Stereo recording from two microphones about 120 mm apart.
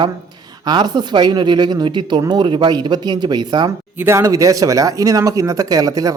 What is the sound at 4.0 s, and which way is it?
Speech, 25° right (ahead or behind).